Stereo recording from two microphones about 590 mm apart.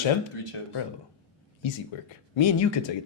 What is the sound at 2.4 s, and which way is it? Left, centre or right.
Speech, left.